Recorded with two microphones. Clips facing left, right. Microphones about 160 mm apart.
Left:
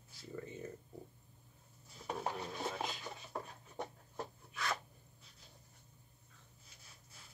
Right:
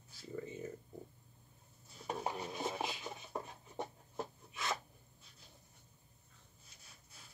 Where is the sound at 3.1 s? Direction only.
20° right (ahead or behind).